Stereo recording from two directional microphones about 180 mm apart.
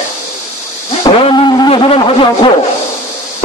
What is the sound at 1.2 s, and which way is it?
Speech, 25° left (ahead or behind).